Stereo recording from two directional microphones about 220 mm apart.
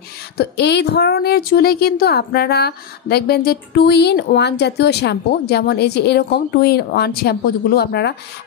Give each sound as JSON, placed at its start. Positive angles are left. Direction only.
{"t": 0.4, "sound": "a woman's voice", "side_deg": 50}